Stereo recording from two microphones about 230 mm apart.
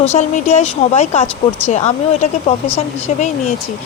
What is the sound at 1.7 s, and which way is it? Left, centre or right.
Speech, left.